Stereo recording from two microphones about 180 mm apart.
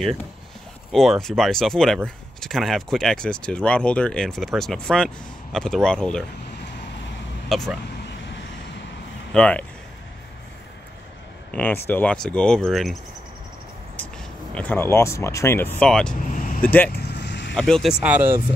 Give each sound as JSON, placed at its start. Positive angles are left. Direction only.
{"t": 0.9, "sound": "speech", "side_deg": 0}
{"t": 7.4, "sound": "speech", "side_deg": 0}
{"t": 9.3, "sound": "speech", "side_deg": 5}
{"t": 11.5, "sound": "speech", "side_deg": 10}
{"t": 13.9, "sound": "speech", "side_deg": 5}
{"t": 16.9, "sound": "vehicle", "side_deg": 70}
{"t": 17.6, "sound": "speech", "side_deg": 5}
{"t": 18.0, "sound": "speech", "side_deg": -10}